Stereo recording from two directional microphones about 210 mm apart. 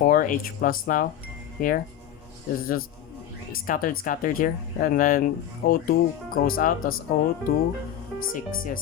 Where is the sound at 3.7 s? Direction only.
40° left (ahead or behind).